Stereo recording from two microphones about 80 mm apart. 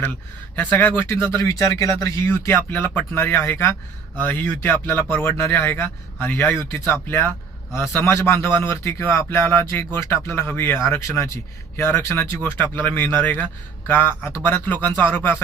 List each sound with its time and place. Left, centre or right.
0.5 s a man's voice: centre
1.3 s a man's voice: left